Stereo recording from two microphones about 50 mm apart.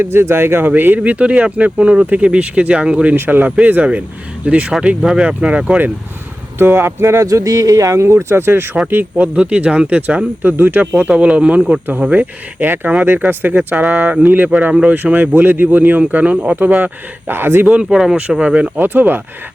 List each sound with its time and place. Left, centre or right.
0.0 s speech: right
0.9 s speech: right
3.2 s speech: right
6.6 s speech: right
8.9 s speech: right
9.3 s speech: right
10.4 s speech: right
11.1 s speech: right
11.7 s speech: right
17.3 s speech: right
17.8 s speech: centre
18.8 s speech: right